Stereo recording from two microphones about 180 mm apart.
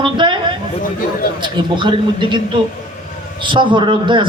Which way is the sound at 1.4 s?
25° right (ahead or behind).